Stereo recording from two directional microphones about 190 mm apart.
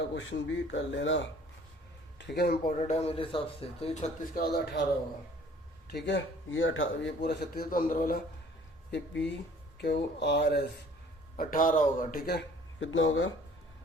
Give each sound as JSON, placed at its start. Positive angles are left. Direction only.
{"t": 0.2, "sound": "speech", "side_deg": 75}
{"t": 2.1, "sound": "speech", "side_deg": 60}
{"t": 2.7, "sound": "speech", "side_deg": 35}
{"t": 4.4, "sound": "a man's voice", "side_deg": 55}
{"t": 5.9, "sound": "a man's voice", "side_deg": 65}
{"t": 8.9, "sound": "a man's voice", "side_deg": 70}
{"t": 11.3, "sound": "a man's voice", "side_deg": 45}